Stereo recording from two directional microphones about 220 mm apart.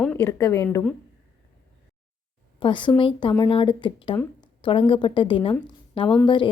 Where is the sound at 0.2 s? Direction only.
15° left (ahead or behind).